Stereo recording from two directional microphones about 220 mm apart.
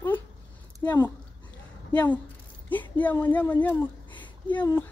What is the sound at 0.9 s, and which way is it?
A woman's voice, 10° left (ahead or behind).